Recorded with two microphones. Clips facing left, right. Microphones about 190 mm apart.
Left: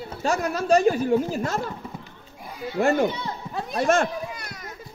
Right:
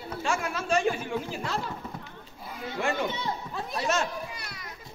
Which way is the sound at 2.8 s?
45° left (ahead or behind).